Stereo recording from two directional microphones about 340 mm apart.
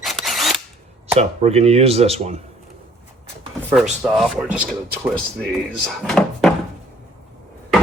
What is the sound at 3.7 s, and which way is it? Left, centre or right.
Speech, centre.